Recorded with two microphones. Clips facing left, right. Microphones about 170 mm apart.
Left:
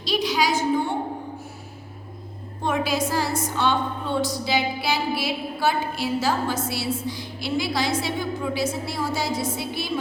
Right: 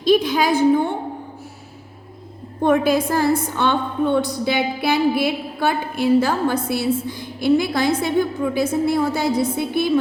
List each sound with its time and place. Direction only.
0.0 s a woman's voice: 55° right (ahead or behind)
2.6 s a woman's voice: 55° right (ahead or behind)